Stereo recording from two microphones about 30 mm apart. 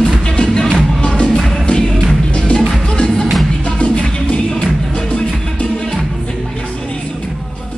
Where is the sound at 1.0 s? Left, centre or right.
Left.